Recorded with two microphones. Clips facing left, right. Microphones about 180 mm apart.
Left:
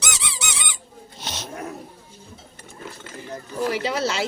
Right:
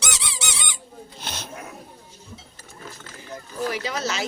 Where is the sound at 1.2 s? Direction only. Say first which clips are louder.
Left 2 dB; 10° right (ahead or behind).